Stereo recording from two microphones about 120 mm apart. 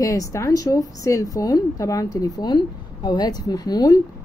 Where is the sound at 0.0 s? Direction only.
30° left (ahead or behind).